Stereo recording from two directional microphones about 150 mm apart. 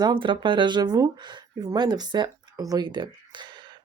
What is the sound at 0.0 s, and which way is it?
A woman's voice, 35° right (ahead or behind).